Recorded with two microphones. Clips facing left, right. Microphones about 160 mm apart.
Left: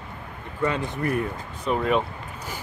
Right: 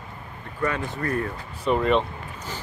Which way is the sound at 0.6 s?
20° left (ahead or behind).